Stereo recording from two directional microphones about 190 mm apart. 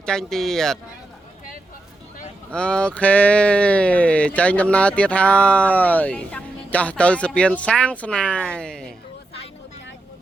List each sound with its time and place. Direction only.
0.0 s speech: 5° left (ahead or behind)
2.5 s speech: 5° left (ahead or behind)